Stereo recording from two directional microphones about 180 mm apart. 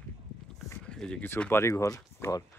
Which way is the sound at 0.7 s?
5° left (ahead or behind).